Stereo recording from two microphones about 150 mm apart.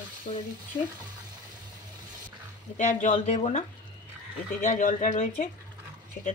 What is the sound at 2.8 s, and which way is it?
Speech, 55° left (ahead or behind).